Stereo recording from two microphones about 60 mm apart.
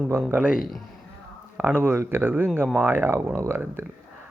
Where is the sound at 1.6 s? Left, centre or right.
Right.